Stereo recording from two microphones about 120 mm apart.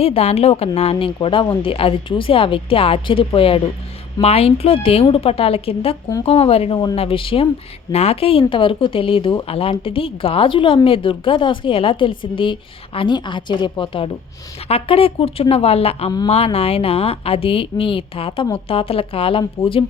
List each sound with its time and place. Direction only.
0.0 s speech: 55° left (ahead or behind)